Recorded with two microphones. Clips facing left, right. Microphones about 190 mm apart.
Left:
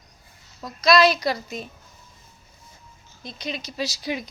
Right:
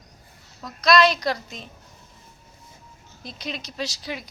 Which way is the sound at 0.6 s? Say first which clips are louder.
Left 1 dB; centre (ahead or behind).